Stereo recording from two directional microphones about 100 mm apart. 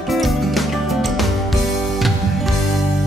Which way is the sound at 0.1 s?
Centre (ahead or behind).